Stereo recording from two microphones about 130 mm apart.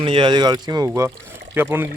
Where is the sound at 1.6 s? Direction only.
15° right (ahead or behind).